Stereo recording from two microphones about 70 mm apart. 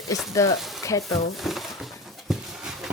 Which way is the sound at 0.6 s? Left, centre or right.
Centre.